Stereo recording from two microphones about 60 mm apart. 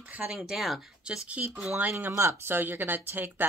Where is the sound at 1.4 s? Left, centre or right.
Right.